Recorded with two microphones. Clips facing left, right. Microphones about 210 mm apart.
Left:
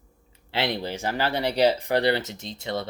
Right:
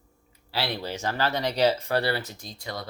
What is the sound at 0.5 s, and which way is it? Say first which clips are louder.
Speech: left 3 dB; 20° left (ahead or behind).